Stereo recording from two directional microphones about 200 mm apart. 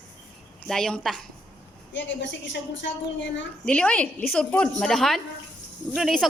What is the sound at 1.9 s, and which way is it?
Speech, 65° left (ahead or behind).